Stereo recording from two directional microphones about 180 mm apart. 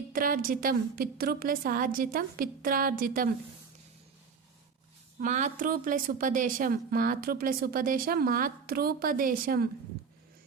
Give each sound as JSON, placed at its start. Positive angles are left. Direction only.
{"t": 0.1, "sound": "a woman's voice", "side_deg": -50}
{"t": 5.2, "sound": "a woman's voice", "side_deg": -45}